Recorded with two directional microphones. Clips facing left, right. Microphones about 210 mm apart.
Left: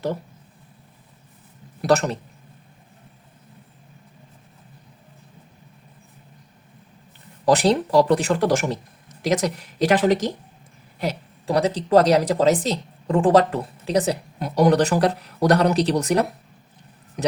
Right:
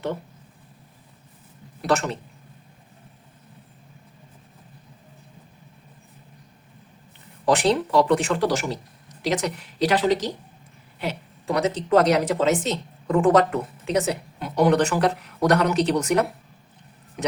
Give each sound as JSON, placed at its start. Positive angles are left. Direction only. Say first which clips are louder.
{"t": 1.8, "sound": "speech", "louder": "left 4 dB", "side_deg": 40}
{"t": 7.4, "sound": "a woman's voice", "louder": "left 2 dB", "side_deg": 40}
{"t": 11.0, "sound": "speech", "louder": "left 2 dB", "side_deg": 35}